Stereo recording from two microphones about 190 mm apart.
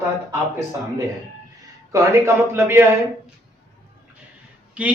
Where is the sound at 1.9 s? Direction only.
15° right (ahead or behind).